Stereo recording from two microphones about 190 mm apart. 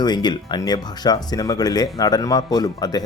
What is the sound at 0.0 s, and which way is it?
Speech, 20° left (ahead or behind).